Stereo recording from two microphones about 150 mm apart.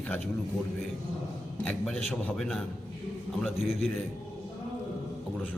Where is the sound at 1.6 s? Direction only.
5° left (ahead or behind).